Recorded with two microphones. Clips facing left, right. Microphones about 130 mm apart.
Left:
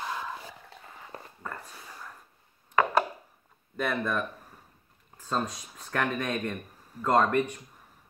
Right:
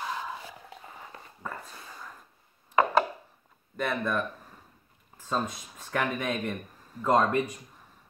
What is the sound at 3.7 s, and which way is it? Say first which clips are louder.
Speech: even; centre (ahead or behind).